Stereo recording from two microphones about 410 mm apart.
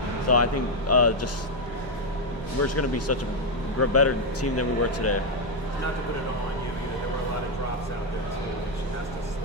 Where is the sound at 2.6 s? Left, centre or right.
Left.